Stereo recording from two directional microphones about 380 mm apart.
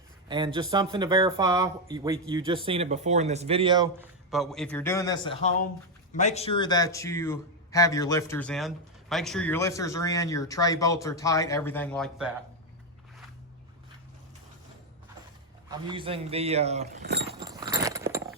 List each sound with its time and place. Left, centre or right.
0.3 s speech: centre
4.3 s speech: centre
15.9 s speech: centre
17.4 s a sound: centre